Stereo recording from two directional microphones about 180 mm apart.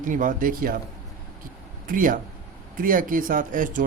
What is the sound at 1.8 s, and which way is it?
Speech, 50° right (ahead or behind).